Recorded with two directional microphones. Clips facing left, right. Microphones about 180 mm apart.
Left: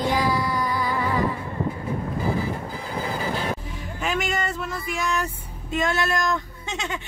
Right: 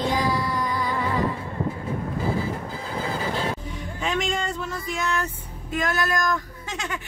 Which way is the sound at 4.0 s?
5° left (ahead or behind).